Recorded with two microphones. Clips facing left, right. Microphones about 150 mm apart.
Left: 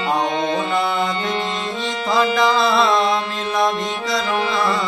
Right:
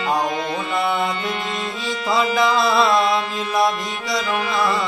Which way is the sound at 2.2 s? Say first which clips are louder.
Left 2 dB; centre (ahead or behind).